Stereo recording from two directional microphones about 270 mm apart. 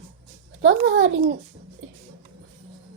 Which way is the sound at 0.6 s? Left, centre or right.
Right.